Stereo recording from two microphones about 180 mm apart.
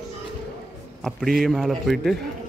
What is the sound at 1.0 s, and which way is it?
A man's voice, centre (ahead or behind).